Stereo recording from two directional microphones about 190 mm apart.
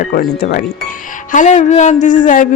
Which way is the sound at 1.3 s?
40° left (ahead or behind).